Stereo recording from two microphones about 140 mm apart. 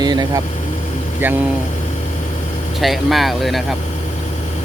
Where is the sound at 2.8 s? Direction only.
Centre (ahead or behind).